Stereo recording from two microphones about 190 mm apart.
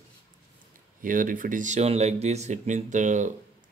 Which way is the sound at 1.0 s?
45° right (ahead or behind).